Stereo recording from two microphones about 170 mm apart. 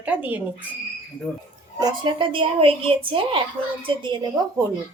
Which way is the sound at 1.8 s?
25° right (ahead or behind).